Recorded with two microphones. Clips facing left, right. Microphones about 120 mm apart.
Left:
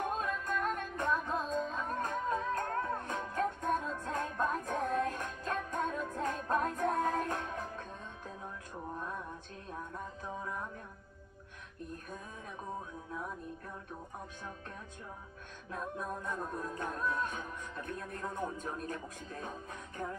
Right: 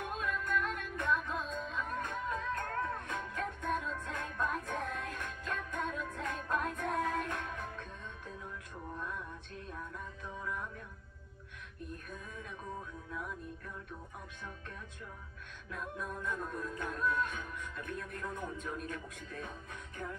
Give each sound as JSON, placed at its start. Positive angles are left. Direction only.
{"t": 0.0, "sound": "music", "side_deg": 35}
{"t": 9.7, "sound": "music", "side_deg": 35}
{"t": 15.7, "sound": "music", "side_deg": 35}